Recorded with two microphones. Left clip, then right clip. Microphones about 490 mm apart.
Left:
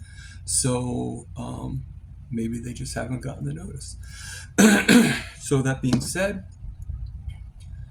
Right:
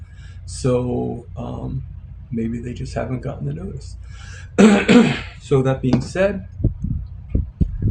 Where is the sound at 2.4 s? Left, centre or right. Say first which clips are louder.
Right 5 dB; left.